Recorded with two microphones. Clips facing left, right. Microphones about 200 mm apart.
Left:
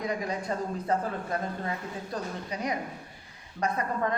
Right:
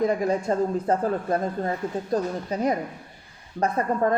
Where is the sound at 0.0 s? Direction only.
50° right (ahead or behind).